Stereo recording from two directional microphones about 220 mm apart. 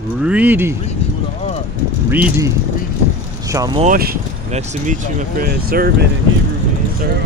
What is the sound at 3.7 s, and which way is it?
Speech, 35° right (ahead or behind).